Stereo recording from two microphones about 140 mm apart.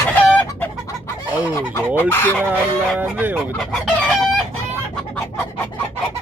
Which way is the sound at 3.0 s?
10° right (ahead or behind).